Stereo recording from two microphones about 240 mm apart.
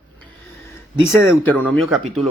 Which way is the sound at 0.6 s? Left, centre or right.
Centre.